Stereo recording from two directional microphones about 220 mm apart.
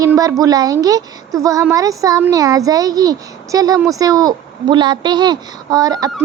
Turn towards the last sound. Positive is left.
turn(degrees=-15)  # may be behind; listen again after turning